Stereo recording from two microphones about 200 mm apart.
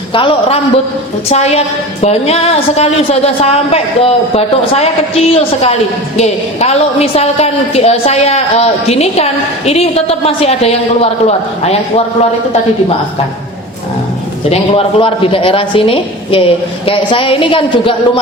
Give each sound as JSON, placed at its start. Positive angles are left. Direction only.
{"t": 0.1, "sound": "a woman's voice", "side_deg": 25}
{"t": 14.5, "sound": "a woman's voice", "side_deg": 30}